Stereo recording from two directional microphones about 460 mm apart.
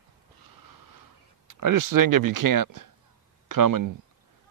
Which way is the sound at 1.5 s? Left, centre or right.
Right.